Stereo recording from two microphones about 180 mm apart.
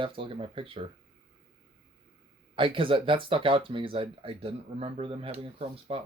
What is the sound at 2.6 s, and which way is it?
Speech, 30° right (ahead or behind).